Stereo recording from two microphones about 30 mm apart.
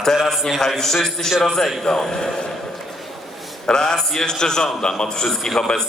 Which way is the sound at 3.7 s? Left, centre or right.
Left.